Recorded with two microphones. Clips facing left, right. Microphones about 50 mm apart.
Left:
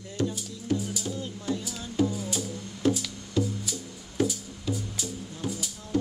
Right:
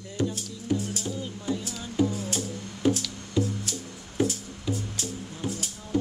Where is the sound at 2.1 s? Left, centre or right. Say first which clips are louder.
Right 1 dB; right.